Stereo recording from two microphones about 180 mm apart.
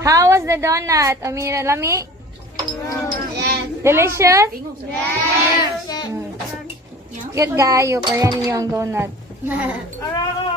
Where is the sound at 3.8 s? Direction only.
15° right (ahead or behind).